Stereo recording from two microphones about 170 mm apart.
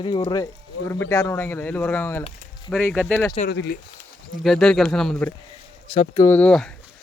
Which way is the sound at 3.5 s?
90° left.